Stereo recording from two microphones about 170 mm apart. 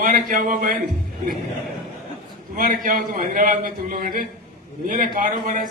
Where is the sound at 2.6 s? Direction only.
50° right (ahead or behind).